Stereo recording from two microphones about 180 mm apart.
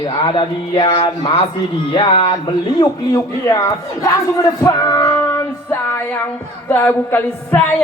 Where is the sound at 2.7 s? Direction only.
20° left (ahead or behind).